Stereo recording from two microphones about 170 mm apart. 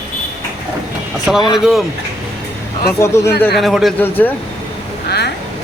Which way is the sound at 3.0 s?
15° left (ahead or behind).